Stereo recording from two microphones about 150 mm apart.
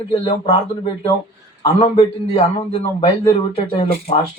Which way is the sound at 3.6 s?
45° left (ahead or behind).